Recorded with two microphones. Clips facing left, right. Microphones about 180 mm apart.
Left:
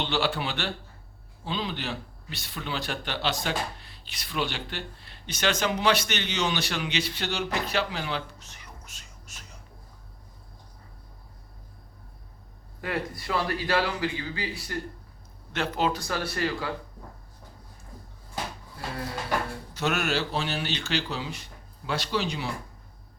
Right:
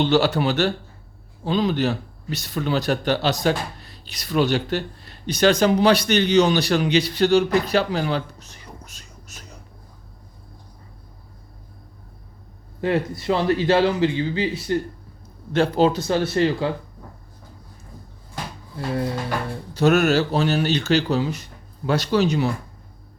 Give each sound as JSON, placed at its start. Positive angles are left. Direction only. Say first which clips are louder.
{"t": 0.0, "sound": "speech", "louder": "right 10 dB", "side_deg": -40}
{"t": 12.8, "sound": "speech", "louder": "right 9 dB", "side_deg": -25}
{"t": 19.7, "sound": "speech", "louder": "right 11 dB", "side_deg": -40}